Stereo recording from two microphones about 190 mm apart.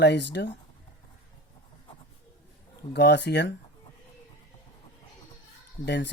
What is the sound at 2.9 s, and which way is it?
Speech, 60° left (ahead or behind).